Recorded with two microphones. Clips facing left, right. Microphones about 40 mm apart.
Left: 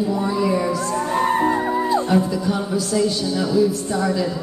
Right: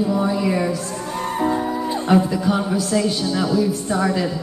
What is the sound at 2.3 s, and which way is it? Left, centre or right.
Music, centre.